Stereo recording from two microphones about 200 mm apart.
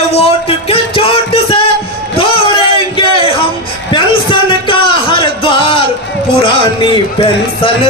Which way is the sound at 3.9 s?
25° left (ahead or behind).